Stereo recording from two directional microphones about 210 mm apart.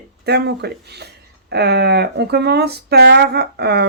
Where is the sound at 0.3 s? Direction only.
50° right (ahead or behind).